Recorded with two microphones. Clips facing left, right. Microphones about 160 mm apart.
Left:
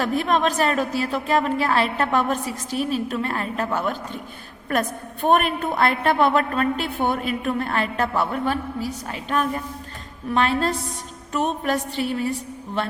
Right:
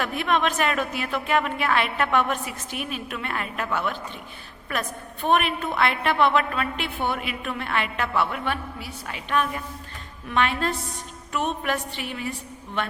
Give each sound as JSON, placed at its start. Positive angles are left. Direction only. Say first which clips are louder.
{"t": 0.0, "sound": "a woman's voice", "louder": "left 3 dB", "side_deg": 35}